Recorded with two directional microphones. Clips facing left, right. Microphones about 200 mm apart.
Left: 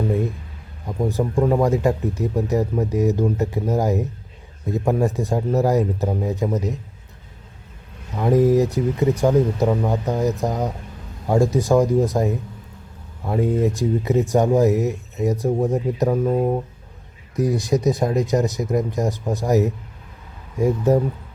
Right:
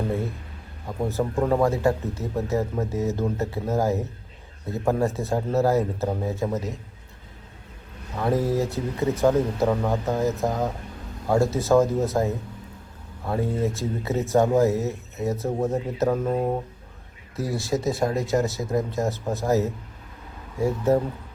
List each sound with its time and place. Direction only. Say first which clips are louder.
0.9 s speech: left 3 dB; 15° left (ahead or behind)
8.2 s speech: left 7 dB; 15° left (ahead or behind)
17.3 s speech: left 6 dB; 15° left (ahead or behind)